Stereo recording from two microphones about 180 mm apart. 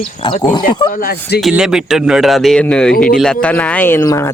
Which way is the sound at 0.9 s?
55° left (ahead or behind).